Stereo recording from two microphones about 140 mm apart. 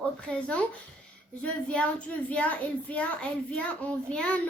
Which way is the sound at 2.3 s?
10° left (ahead or behind).